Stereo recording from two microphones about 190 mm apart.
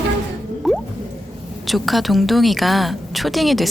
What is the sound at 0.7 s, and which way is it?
Drip, centre (ahead or behind).